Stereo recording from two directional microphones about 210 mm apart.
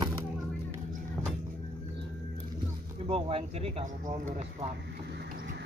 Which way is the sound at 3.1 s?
25° right (ahead or behind).